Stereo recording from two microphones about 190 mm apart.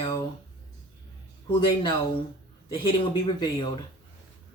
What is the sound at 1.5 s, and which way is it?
Speech, 25° left (ahead or behind).